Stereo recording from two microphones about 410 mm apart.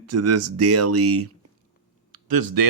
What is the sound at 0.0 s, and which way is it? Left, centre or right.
Speech, right.